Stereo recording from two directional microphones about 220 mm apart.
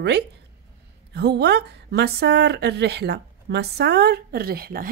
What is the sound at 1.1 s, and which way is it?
Speech, 50° right (ahead or behind).